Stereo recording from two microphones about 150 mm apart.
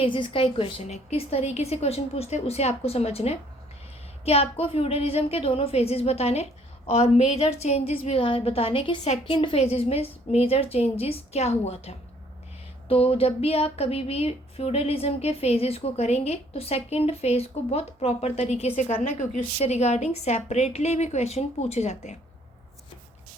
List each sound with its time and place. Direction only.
0.0 s a woman's voice: 35° left (ahead or behind)